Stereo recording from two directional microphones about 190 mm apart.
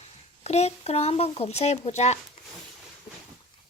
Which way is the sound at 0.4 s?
35° left (ahead or behind).